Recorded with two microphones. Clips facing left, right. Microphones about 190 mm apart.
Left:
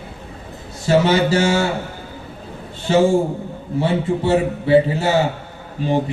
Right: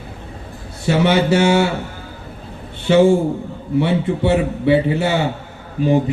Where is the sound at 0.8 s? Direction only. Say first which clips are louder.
Even; 65° right (ahead or behind).